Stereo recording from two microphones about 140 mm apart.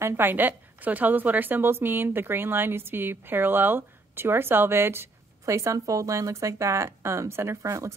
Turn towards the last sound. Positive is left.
turn(degrees=-20)  # may be behind; listen again after turning